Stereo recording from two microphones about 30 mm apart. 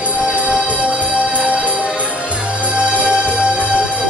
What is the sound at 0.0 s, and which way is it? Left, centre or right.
Music, right.